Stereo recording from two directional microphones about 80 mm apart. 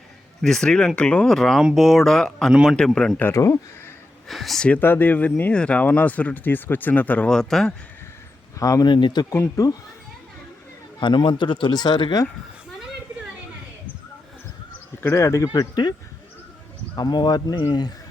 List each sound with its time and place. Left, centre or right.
0.4 s speech: centre
2.5 s a man's voice: centre
2.7 s speech: centre
3.3 s speech: left
4.3 s speech: centre
4.8 s speech: left
7.3 s speech: centre
8.5 s speech: left
8.9 s speech: left
11.0 s speech: left
15.0 s speech: left
15.5 s speech: left